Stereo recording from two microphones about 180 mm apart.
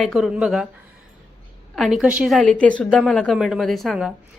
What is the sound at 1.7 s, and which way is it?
A woman's voice, centre (ahead or behind).